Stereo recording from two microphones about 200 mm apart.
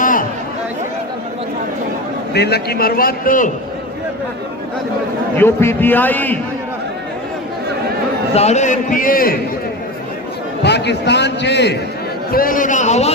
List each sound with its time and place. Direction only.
0.0 s chatter: 45° left (ahead or behind)
2.3 s a man's voice: 55° left (ahead or behind)
5.4 s a man's voice: 10° left (ahead or behind)
8.3 s a man's voice: 35° left (ahead or behind)
10.6 s a man's voice: 60° left (ahead or behind)
12.3 s a man's voice: 45° left (ahead or behind)